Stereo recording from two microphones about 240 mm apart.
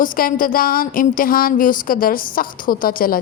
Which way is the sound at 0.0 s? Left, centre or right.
Left.